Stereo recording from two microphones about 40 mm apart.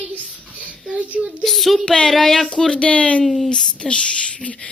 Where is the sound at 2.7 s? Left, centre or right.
Left.